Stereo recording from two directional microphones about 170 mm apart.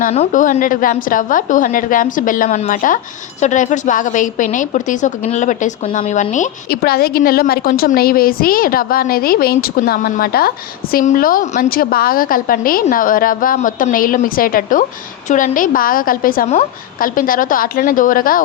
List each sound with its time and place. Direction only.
0.0 s a woman's voice: 45° left (ahead or behind)
6.7 s a woman's voice: 65° left (ahead or behind)